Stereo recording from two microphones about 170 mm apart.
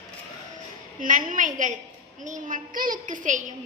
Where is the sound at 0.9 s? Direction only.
50° right (ahead or behind).